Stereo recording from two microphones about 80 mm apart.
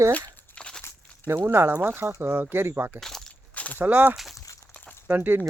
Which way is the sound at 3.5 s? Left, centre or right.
Centre.